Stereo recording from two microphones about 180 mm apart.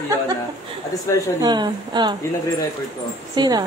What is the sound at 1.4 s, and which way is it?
Speech, 25° right (ahead or behind).